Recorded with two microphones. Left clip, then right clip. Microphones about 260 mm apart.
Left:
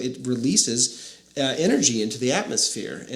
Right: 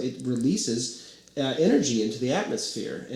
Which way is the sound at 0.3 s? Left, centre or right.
Left.